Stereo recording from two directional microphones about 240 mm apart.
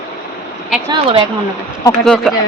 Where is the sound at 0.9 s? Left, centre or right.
Right.